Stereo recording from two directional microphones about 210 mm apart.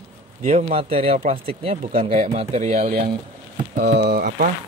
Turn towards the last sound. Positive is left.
turn(degrees=-50)  # may be behind; listen again after turning